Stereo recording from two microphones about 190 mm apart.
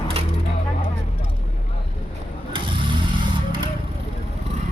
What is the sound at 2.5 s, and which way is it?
Vehicle, 25° right (ahead or behind).